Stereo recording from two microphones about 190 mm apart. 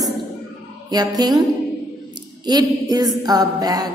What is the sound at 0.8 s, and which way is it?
Music, 20° right (ahead or behind).